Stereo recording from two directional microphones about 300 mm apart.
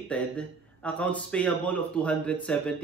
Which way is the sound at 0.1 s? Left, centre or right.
Centre.